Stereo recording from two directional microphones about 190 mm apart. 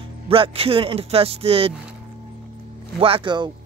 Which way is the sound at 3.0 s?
30° right (ahead or behind).